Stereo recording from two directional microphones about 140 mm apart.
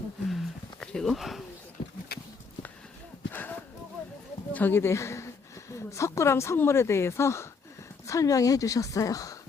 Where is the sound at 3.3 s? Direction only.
15° left (ahead or behind).